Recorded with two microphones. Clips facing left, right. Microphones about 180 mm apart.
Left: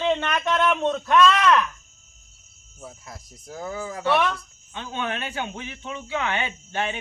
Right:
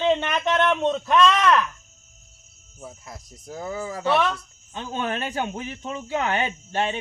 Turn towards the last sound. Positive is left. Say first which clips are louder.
# right 3 dB
turn(degrees=-35)  # may be behind; listen again after turning